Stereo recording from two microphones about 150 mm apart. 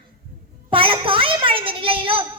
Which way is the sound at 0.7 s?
35° right (ahead or behind).